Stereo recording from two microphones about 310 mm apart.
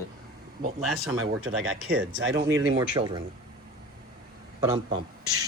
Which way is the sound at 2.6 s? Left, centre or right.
Centre.